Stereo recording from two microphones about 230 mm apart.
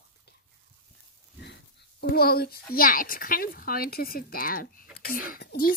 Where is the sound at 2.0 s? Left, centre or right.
Left.